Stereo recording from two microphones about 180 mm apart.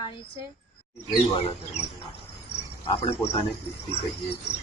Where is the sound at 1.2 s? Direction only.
35° left (ahead or behind).